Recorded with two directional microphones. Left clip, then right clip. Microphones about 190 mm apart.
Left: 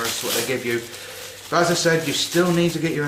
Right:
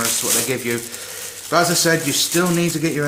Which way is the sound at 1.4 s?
50° right (ahead or behind).